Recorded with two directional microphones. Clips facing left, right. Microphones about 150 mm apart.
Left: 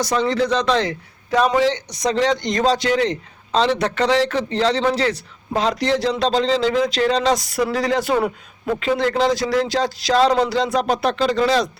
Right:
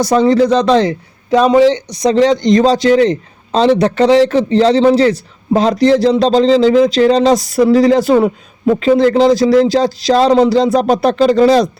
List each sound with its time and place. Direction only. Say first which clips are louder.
0.0 s speech: right 9 dB; 40° right (ahead or behind)
1.3 s speech: right 8 dB; 25° right (ahead or behind)
10.3 s speech: right 9 dB; 25° right (ahead or behind)
10.6 s speech: right 8 dB; 35° right (ahead or behind)